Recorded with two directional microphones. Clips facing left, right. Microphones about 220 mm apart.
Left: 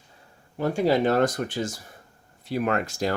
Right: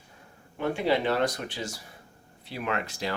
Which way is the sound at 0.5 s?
40° left (ahead or behind).